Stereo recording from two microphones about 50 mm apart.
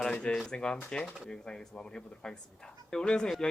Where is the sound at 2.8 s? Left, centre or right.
Centre.